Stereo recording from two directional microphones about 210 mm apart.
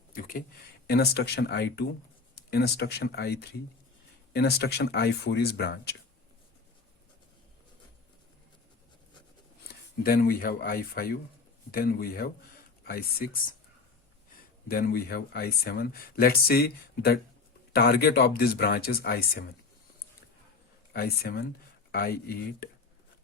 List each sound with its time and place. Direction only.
0.1 s speech: 40° left (ahead or behind)
9.6 s speech: 45° left (ahead or behind)
14.7 s speech: 45° left (ahead or behind)
20.9 s speech: 45° left (ahead or behind)